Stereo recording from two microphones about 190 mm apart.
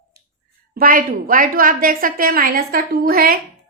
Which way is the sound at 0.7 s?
50° right (ahead or behind).